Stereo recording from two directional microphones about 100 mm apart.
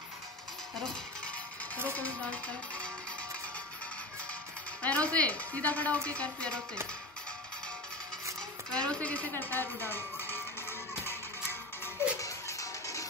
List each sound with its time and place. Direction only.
2.0 s speech: 15° left (ahead or behind)
4.8 s speech: 10° left (ahead or behind)
8.4 s a sound: 10° left (ahead or behind)
11.8 s music: 30° left (ahead or behind)